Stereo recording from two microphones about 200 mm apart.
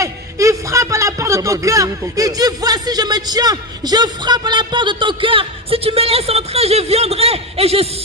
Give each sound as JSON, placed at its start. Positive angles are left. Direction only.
{"t": 0.0, "sound": "speech", "side_deg": -15}